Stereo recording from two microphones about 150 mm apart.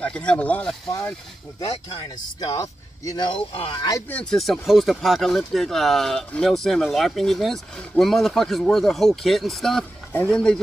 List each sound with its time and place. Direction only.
0.0 s speech: 5° left (ahead or behind)
0.8 s speech: 20° left (ahead or behind)
2.4 s speech: 25° left (ahead or behind)
4.1 s speech: 5° left (ahead or behind)